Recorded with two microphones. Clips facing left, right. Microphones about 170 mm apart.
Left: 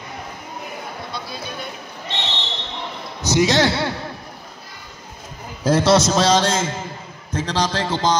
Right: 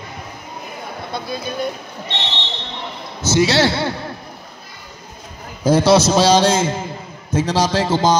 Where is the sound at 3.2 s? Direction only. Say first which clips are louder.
Right 1 dB; 15° left (ahead or behind).